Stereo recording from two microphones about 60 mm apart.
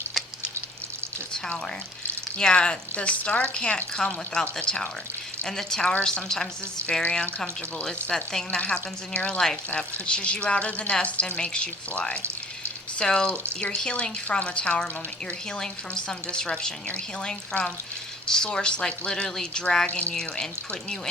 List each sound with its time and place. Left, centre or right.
2.4 s speech: centre
5.8 s speech: left
8.0 s speech: centre
8.4 s speech: left
20.1 s speech: centre